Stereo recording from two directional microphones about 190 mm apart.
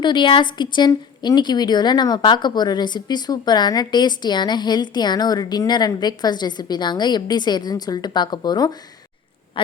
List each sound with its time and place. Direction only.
0.0 s a woman's voice: 25° left (ahead or behind)